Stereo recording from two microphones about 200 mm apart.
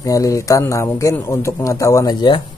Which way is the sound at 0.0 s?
15° left (ahead or behind).